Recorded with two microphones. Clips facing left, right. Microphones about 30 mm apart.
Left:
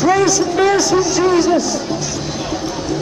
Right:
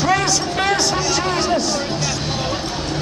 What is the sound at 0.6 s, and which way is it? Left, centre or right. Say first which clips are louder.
Speech: left 5 dB; right.